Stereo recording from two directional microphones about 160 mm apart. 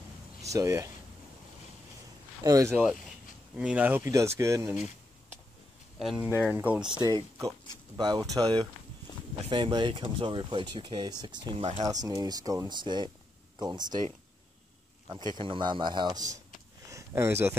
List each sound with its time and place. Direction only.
0.5 s speech: 20° right (ahead or behind)
2.4 s speech: 20° right (ahead or behind)
3.5 s speech: 10° right (ahead or behind)
4.0 s speech: 20° right (ahead or behind)
4.6 s speech: centre (ahead or behind)
5.9 s speech: centre (ahead or behind)
6.9 s speech: 25° right (ahead or behind)
15.0 s speech: 30° right (ahead or behind)
16.9 s speech: 15° right (ahead or behind)